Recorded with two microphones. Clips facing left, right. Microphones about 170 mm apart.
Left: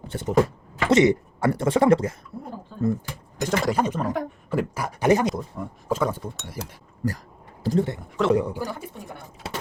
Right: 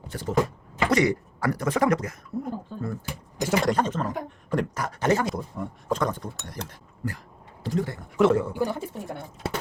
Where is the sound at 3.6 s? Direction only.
10° left (ahead or behind).